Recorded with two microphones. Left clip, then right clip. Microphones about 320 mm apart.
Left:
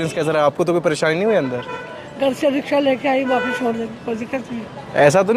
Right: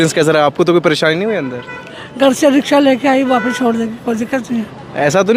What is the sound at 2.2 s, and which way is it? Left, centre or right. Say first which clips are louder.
Speech: right 7 dB; right.